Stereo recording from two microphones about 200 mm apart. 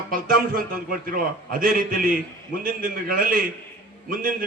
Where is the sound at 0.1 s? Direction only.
45° right (ahead or behind).